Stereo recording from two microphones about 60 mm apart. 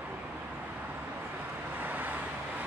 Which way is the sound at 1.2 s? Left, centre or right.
Right.